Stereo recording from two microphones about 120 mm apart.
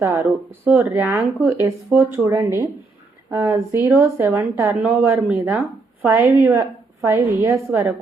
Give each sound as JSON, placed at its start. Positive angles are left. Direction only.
{"t": 0.0, "sound": "speech", "side_deg": -20}